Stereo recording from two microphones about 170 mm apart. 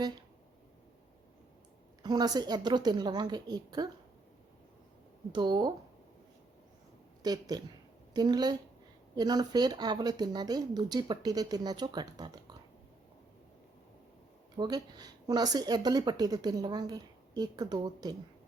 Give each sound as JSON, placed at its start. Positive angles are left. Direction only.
{"t": 2.0, "sound": "speech", "side_deg": -25}
{"t": 5.3, "sound": "speech", "side_deg": -25}
{"t": 7.2, "sound": "speech", "side_deg": -25}
{"t": 14.5, "sound": "speech", "side_deg": -25}